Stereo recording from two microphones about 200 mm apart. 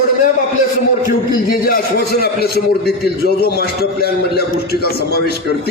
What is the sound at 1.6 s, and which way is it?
A man's voice, 50° left (ahead or behind).